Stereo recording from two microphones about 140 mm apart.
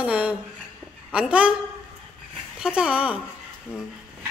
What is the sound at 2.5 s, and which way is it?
Speech, 5° right (ahead or behind).